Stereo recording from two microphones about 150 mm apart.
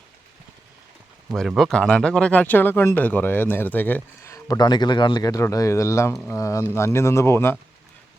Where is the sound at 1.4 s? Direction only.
Centre (ahead or behind).